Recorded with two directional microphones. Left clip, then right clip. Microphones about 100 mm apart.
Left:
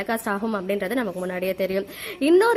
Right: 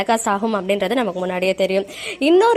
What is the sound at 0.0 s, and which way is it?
A woman's voice, 20° right (ahead or behind).